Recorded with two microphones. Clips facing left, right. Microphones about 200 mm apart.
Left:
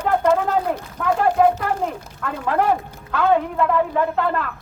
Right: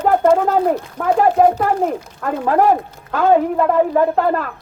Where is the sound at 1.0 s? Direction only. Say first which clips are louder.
Right 3 dB; 45° right (ahead or behind).